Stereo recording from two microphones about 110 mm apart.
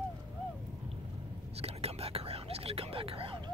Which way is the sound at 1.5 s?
70° right (ahead or behind).